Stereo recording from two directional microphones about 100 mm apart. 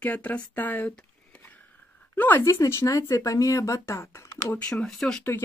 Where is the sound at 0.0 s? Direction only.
15° left (ahead or behind).